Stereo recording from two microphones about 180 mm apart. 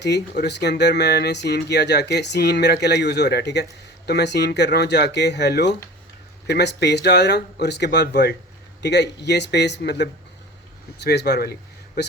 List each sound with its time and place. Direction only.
0.0 s speech: 70° left (ahead or behind)